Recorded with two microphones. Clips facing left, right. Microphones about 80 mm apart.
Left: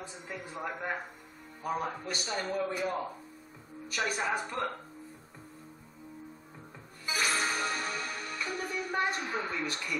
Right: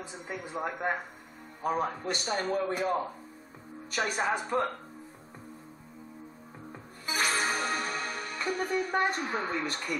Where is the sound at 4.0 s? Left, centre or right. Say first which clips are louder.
Right 2 dB; right.